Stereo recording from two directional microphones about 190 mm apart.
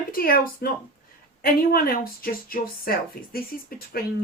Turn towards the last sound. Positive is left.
turn(degrees=55)  # may be behind; listen again after turning